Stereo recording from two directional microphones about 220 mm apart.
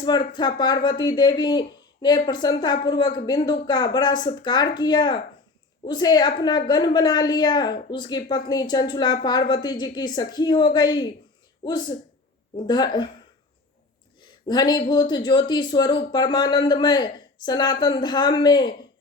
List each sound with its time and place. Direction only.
0.0 s speech: 20° left (ahead or behind)
14.2 s speech: 20° left (ahead or behind)